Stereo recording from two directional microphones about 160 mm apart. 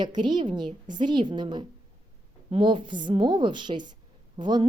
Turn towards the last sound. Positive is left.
turn(degrees=-25)  # may be behind; listen again after turning